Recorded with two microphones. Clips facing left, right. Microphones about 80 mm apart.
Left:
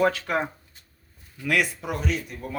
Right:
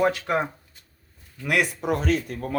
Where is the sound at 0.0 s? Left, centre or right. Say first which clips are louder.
Right 1 dB; centre.